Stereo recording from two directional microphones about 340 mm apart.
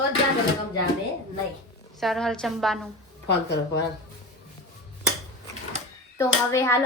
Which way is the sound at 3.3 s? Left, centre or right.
Left.